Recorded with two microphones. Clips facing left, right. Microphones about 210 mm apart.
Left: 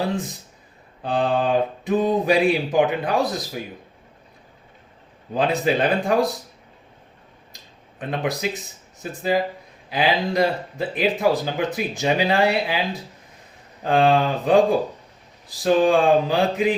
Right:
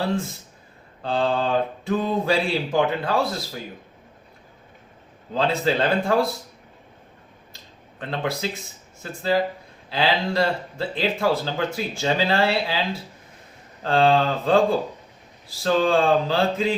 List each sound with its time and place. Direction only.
0.0 s speech: 15° left (ahead or behind)
5.3 s speech: 15° left (ahead or behind)
7.5 s a sound: 15° left (ahead or behind)
9.3 s speech: 15° left (ahead or behind)